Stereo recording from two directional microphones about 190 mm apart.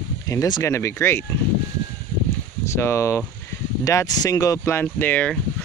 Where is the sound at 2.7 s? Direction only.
15° left (ahead or behind).